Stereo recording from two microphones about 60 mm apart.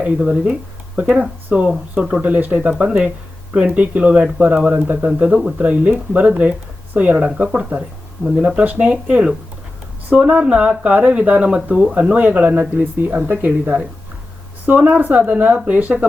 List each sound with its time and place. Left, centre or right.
0.0 s speech: centre
1.0 s speech: centre
1.5 s speech: centre
1.7 s speech: centre
2.2 s speech: right
10.4 s speech: centre